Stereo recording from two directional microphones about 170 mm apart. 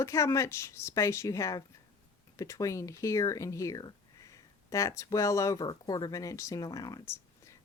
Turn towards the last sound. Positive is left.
turn(degrees=15)  # may be behind; listen again after turning